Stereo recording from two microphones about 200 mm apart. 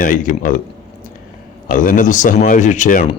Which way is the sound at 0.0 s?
40° left (ahead or behind).